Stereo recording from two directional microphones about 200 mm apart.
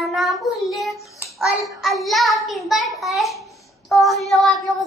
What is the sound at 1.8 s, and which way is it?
Child singing, centre (ahead or behind).